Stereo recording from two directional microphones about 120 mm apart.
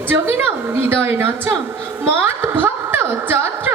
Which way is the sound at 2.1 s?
20° right (ahead or behind).